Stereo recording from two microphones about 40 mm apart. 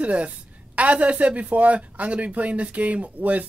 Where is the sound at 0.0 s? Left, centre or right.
Right.